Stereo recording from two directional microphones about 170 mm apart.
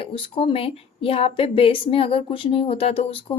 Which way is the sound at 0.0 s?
30° left (ahead or behind).